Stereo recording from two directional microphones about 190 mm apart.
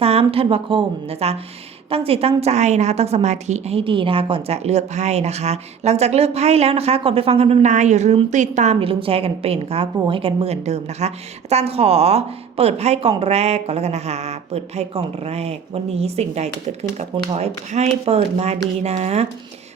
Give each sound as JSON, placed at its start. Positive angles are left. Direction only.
{"t": 0.0, "sound": "a woman's voice", "side_deg": -30}